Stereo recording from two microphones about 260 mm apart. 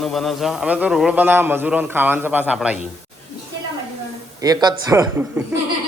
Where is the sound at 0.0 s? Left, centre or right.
Centre.